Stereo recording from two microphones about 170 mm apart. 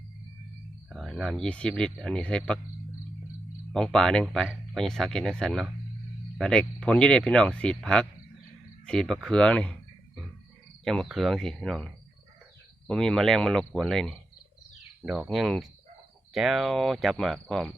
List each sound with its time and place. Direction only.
0.9 s speech: centre (ahead or behind)
3.7 s speech: 5° left (ahead or behind)
10.8 s speech: centre (ahead or behind)
12.9 s speech: 5° left (ahead or behind)